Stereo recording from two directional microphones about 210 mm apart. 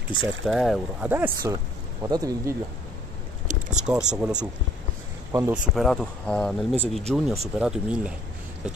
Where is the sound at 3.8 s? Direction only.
5° right (ahead or behind).